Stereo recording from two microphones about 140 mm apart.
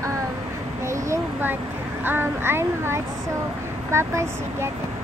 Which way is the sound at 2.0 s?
15° right (ahead or behind).